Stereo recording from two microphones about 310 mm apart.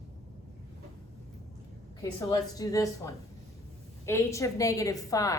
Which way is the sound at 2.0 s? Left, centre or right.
Centre.